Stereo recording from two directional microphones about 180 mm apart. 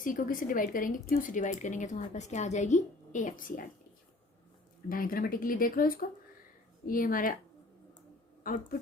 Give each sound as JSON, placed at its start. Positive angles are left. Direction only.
{"t": 0.0, "sound": "speech", "side_deg": 50}
{"t": 4.9, "sound": "speech", "side_deg": 50}
{"t": 8.4, "sound": "speech", "side_deg": 50}